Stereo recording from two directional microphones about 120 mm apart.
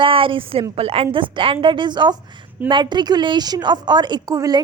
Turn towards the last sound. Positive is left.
turn(degrees=-30)  # may be behind; listen again after turning